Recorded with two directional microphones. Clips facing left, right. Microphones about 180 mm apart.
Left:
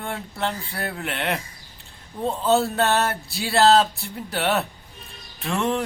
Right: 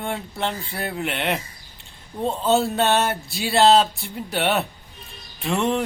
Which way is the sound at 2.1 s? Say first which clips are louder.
Right 1 dB; 15° right (ahead or behind).